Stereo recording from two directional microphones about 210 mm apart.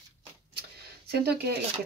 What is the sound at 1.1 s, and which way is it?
Speech, 50° right (ahead or behind).